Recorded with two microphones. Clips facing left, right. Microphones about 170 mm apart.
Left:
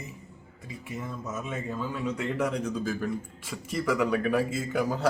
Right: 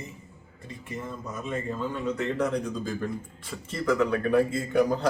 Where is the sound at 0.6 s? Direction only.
5° left (ahead or behind).